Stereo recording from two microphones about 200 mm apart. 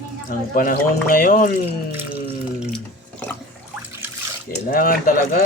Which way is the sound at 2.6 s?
5° left (ahead or behind).